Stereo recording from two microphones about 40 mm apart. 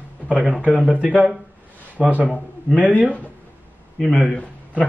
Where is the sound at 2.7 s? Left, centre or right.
Left.